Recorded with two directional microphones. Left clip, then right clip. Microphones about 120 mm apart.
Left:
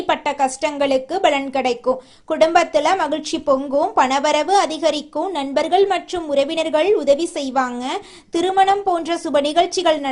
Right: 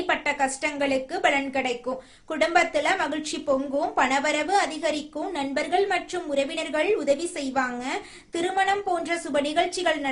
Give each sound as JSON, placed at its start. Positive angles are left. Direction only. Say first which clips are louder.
{"t": 0.1, "sound": "a woman's voice", "louder": "left 6 dB", "side_deg": 45}